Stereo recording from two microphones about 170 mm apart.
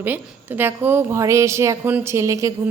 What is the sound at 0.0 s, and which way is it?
A woman's voice, 10° right (ahead or behind).